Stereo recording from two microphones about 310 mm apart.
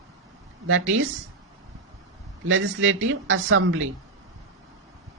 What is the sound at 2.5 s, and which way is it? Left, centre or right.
Speech, right.